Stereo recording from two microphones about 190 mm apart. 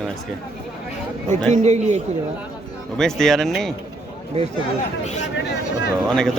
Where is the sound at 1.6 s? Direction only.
35° right (ahead or behind).